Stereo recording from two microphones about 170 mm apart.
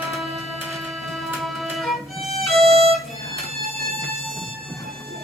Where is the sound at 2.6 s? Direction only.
35° right (ahead or behind).